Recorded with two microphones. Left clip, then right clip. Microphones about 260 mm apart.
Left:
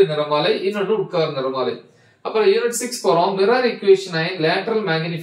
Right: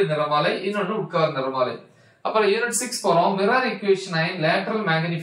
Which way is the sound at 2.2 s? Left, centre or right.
Centre.